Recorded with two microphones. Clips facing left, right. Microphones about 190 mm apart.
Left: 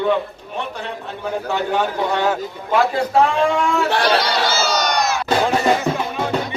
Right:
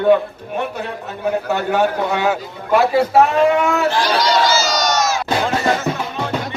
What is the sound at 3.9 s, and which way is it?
Crowd, 60° left (ahead or behind).